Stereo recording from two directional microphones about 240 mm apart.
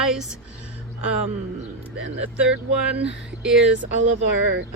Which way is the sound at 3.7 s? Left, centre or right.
Right.